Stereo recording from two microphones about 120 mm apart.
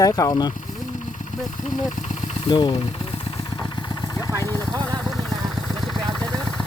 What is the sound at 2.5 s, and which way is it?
Speech, 40° left (ahead or behind).